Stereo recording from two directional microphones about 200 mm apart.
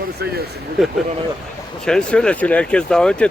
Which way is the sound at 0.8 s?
5° right (ahead or behind).